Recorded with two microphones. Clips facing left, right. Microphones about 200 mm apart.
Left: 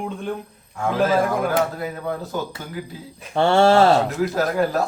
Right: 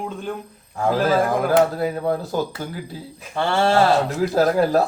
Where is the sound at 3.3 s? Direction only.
25° left (ahead or behind).